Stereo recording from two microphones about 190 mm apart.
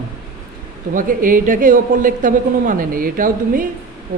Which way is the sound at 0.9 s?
45° right (ahead or behind).